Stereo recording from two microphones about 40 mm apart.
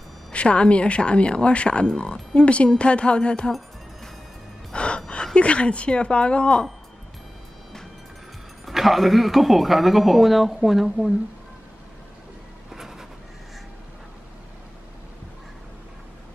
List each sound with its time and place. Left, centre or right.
0.3 s speech: left
4.7 s a woman's voice: left
8.6 s speech: centre
12.7 s a sound: centre